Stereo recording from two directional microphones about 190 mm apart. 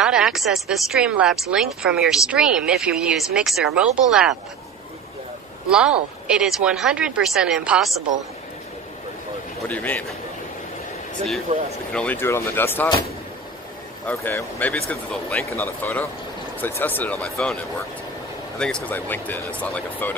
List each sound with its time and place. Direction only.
0.0 s speech: 5° right (ahead or behind)
5.7 s speech: 5° right (ahead or behind)
9.7 s speech: 10° left (ahead or behind)
11.5 s speech: 40° right (ahead or behind)
11.9 s speech: 5° left (ahead or behind)
14.0 s speech: 10° left (ahead or behind)
18.6 s speech: 5° left (ahead or behind)